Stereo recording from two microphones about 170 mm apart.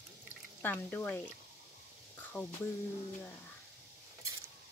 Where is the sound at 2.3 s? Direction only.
10° left (ahead or behind).